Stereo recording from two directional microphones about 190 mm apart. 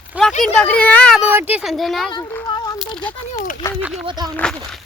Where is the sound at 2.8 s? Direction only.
5° left (ahead or behind).